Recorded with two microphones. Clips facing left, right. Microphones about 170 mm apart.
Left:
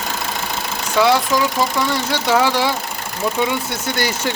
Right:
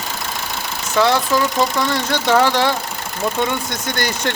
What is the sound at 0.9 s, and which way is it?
Speech, 10° left (ahead or behind).